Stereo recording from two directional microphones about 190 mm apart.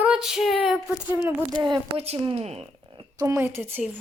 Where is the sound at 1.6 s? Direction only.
30° right (ahead or behind); by 3.9 s 10° right (ahead or behind).